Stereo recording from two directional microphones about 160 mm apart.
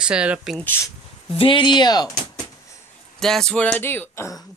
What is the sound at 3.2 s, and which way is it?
Speech, 5° left (ahead or behind).